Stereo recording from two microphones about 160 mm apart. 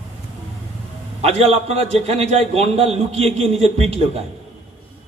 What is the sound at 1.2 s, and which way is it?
A man's voice, 40° right (ahead or behind).